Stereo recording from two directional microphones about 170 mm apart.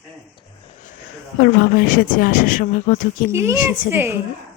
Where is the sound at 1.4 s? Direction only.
55° left (ahead or behind).